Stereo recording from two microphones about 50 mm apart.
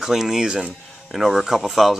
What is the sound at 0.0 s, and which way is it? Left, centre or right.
Speech, centre.